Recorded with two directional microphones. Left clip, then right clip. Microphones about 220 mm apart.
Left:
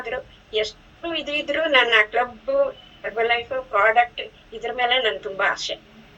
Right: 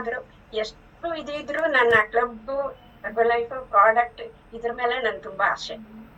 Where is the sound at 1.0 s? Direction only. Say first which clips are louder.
Left 4 dB; 5° right (ahead or behind).